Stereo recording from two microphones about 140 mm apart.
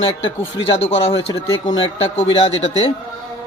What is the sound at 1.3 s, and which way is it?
Speech, 30° left (ahead or behind).